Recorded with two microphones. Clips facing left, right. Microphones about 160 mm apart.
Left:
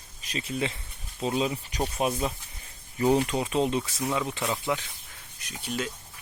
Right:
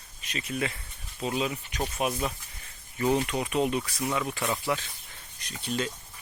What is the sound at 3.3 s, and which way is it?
Speech, 30° left (ahead or behind).